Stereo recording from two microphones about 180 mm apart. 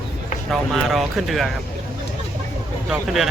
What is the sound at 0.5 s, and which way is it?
Speech, centre (ahead or behind).